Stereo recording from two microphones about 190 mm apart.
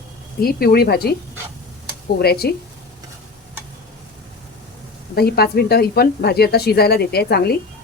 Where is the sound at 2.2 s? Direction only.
55° left (ahead or behind).